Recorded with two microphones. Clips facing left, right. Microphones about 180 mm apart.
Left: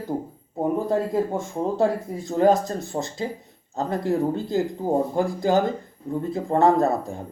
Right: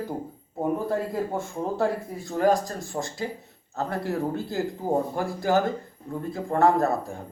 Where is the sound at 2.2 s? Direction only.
25° left (ahead or behind).